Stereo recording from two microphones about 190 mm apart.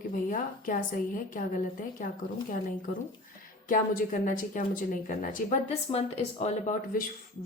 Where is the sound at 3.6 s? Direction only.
45° left (ahead or behind).